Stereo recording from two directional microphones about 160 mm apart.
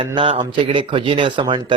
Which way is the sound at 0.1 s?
30° right (ahead or behind).